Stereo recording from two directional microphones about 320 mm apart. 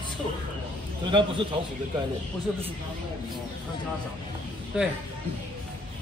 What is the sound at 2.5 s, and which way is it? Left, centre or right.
Speech, centre.